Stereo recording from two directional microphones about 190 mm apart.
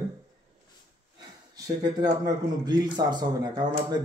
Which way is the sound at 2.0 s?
20° right (ahead or behind).